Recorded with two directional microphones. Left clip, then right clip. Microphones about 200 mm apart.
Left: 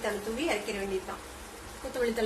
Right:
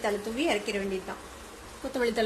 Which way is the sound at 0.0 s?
45° right (ahead or behind).